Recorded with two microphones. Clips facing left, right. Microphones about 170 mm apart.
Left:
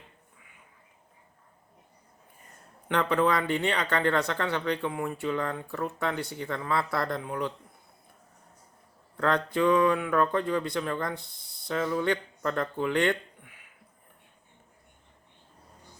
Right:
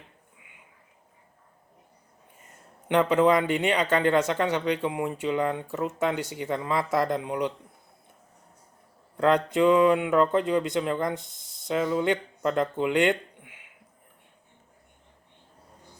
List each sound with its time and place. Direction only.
2.9 s speech: 20° right (ahead or behind)
9.1 s speech: 15° right (ahead or behind)